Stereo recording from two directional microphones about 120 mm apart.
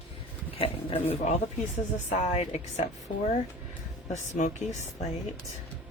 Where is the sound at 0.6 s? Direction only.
50° left (ahead or behind).